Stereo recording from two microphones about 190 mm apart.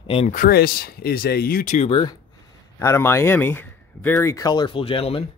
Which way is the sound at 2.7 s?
15° left (ahead or behind).